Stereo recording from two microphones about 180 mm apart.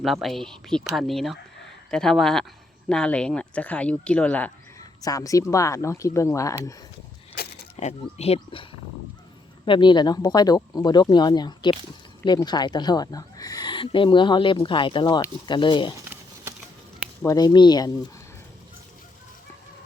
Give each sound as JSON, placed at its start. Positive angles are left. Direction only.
{"t": 0.0, "sound": "speech", "side_deg": 0}
{"t": 4.8, "sound": "speech", "side_deg": 20}
{"t": 7.8, "sound": "speech", "side_deg": 35}
{"t": 9.6, "sound": "speech", "side_deg": 25}
{"t": 16.0, "sound": "a sound", "side_deg": -15}
{"t": 17.2, "sound": "speech", "side_deg": 20}